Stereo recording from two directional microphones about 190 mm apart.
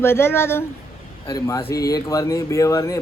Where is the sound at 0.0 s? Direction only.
10° left (ahead or behind).